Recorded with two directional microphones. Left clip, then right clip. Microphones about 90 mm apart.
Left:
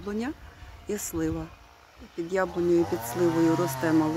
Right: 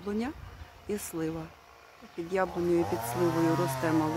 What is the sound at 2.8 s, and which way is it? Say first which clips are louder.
Speech: left 3 dB; 55° right (ahead or behind).